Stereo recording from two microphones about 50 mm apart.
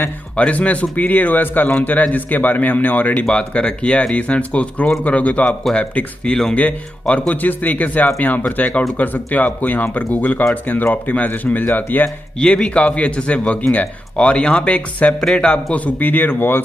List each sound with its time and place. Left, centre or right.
0.4 s a man's voice: left
3.3 s a man's voice: centre; by 12.1 s left
12.4 s a man's voice: centre; by 16.6 s left